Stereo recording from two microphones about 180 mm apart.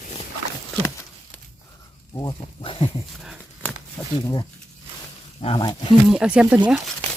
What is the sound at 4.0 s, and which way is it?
Speech, 10° left (ahead or behind).